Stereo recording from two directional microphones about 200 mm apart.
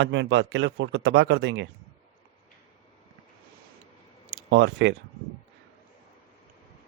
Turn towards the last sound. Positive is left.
turn(degrees=-65)  # may be behind; listen again after turning